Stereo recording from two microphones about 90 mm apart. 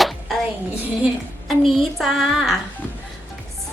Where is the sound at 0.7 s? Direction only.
15° right (ahead or behind).